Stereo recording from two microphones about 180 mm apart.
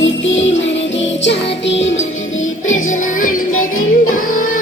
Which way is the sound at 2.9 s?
45° left (ahead or behind).